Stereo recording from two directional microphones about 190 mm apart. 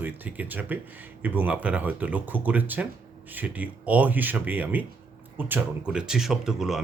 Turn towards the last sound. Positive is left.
turn(degrees=0)  # may be behind; listen again after turning